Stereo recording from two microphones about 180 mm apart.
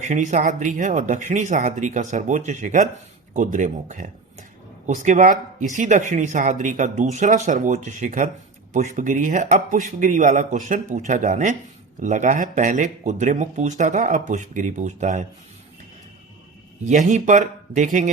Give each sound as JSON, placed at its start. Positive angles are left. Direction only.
{"t": 0.0, "sound": "speech", "side_deg": -45}
{"t": 16.8, "sound": "speech", "side_deg": -40}